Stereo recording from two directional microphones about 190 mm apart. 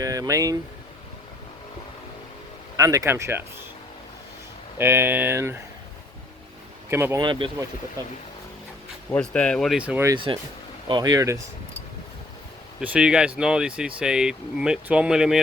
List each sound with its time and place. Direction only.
0.0 s speech: 20° right (ahead or behind)
2.7 s speech: 15° right (ahead or behind)
4.8 s speech: 10° right (ahead or behind)
6.9 s speech: 10° right (ahead or behind)
7.2 s speech: 25° right (ahead or behind)
9.0 s speech: 5° left (ahead or behind); by 10.2 s 10° right (ahead or behind)
10.8 s speech: 20° right (ahead or behind)
12.8 s speech: 5° right (ahead or behind)